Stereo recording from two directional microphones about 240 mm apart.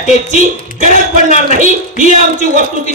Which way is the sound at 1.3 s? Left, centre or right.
Right.